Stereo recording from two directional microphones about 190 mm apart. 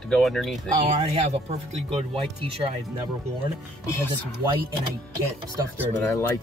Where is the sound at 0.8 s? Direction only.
35° right (ahead or behind).